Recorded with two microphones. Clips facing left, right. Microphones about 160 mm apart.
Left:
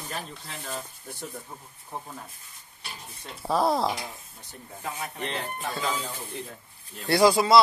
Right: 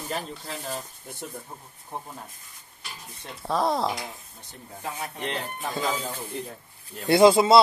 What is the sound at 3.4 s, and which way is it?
Speech, 5° left (ahead or behind).